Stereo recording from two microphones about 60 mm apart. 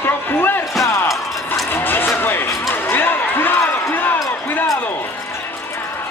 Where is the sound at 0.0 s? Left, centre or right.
Left.